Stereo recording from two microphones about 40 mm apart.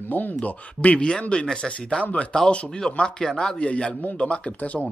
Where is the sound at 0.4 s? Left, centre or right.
Left.